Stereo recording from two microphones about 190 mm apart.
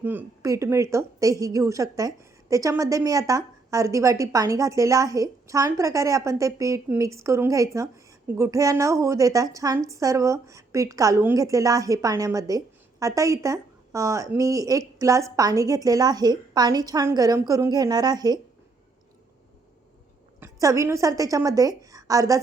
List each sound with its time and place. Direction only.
0.0 s a woman's voice: 10° right (ahead or behind)
20.4 s a woman's voice: 15° right (ahead or behind)